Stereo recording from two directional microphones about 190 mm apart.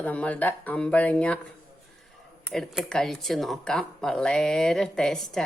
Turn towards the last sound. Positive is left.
turn(degrees=0)  # may be behind; listen again after turning